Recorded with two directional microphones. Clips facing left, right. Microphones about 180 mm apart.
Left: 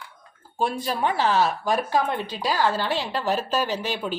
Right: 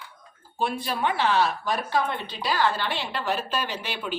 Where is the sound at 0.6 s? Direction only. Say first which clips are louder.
Left 2 dB; 40° left (ahead or behind).